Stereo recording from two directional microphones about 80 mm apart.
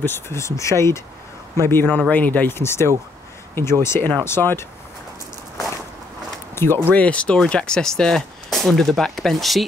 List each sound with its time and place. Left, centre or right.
0.0 s speech: left
6.5 s speech: left
6.9 s speech: centre